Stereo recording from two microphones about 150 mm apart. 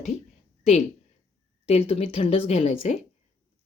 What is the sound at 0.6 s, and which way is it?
A woman's voice, 50° left (ahead or behind).